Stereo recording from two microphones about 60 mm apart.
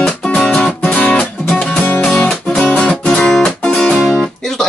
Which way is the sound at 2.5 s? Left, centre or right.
Centre.